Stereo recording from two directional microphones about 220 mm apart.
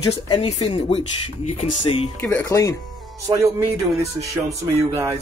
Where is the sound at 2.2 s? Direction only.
10° left (ahead or behind).